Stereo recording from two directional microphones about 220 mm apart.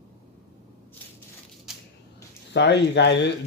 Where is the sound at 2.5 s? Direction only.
50° left (ahead or behind).